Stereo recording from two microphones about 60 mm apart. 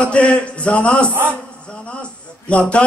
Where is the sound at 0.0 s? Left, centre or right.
Centre.